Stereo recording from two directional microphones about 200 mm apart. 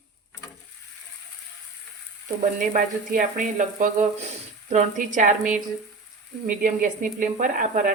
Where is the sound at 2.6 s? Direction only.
40° right (ahead or behind).